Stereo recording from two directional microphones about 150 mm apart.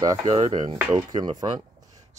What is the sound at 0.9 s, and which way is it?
Speech, 30° right (ahead or behind).